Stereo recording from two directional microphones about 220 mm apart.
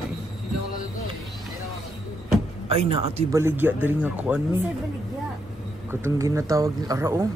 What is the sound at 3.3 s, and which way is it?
Speech, 10° right (ahead or behind).